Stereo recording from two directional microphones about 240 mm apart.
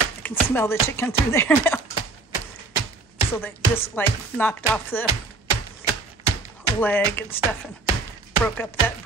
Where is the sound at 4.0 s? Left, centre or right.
Centre.